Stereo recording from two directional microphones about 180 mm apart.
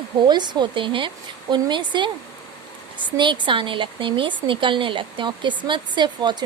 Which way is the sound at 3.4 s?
30° right (ahead or behind).